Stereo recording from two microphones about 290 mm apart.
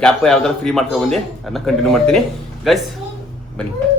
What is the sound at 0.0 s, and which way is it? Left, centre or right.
A man's voice, centre.